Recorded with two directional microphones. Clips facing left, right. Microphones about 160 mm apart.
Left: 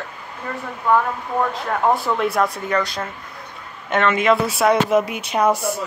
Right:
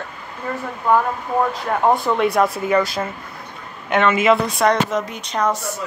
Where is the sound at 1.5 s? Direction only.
5° right (ahead or behind).